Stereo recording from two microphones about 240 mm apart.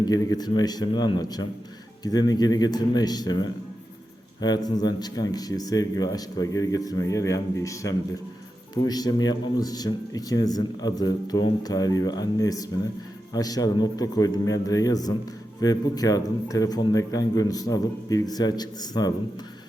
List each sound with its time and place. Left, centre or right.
0.0 s speech: centre